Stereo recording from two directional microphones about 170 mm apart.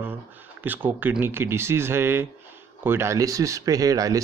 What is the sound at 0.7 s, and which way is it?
Speech, 10° right (ahead or behind).